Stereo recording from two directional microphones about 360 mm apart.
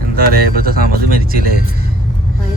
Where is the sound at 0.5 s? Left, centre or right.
Right.